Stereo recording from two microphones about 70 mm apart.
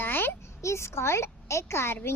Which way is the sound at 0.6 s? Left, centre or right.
Left.